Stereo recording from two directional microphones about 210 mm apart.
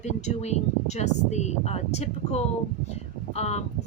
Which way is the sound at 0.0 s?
30° left (ahead or behind).